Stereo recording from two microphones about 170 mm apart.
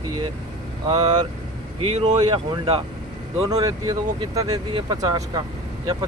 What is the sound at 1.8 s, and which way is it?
Speech, 40° right (ahead or behind).